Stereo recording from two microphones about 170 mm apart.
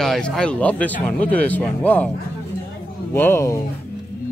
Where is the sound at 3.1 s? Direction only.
15° left (ahead or behind).